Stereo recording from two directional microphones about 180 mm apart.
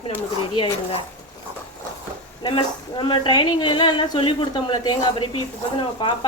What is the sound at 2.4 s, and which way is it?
A woman's voice, 25° left (ahead or behind).